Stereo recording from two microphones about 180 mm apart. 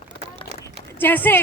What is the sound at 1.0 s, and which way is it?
Speech, 10° left (ahead or behind).